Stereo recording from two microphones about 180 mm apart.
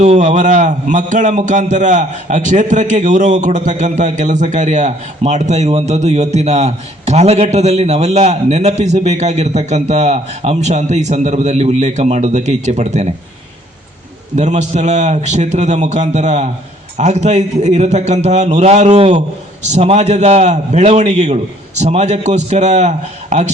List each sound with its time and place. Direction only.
0.0 s a man's voice: 40° right (ahead or behind)
14.3 s a man's voice: 40° right (ahead or behind)